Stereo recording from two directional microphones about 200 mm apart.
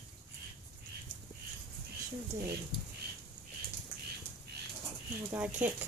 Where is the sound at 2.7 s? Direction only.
25° left (ahead or behind).